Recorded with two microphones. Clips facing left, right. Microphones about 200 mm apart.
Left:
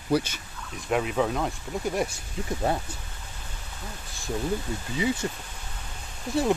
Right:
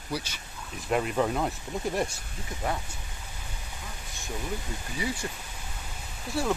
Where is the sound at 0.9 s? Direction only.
Centre (ahead or behind).